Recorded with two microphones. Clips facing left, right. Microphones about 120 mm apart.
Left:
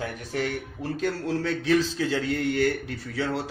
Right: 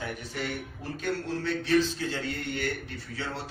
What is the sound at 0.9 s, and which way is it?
A man's voice, 90° left.